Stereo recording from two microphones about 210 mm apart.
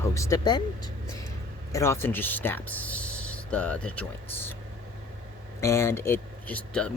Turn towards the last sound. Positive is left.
turn(degrees=5)  # may be behind; listen again after turning